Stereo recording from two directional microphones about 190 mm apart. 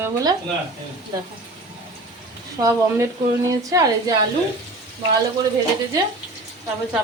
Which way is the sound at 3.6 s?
20° right (ahead or behind).